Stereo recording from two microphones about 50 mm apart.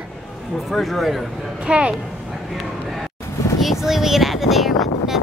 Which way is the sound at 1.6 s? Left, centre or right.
Right.